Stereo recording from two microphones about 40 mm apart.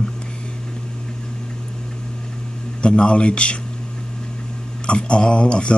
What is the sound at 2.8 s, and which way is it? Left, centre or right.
Speech, left.